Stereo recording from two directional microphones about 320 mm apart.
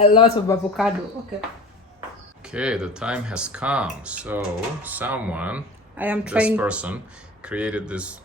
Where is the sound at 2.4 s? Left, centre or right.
Centre.